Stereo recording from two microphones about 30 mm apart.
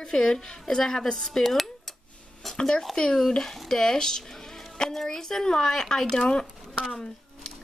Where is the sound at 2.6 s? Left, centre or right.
Left.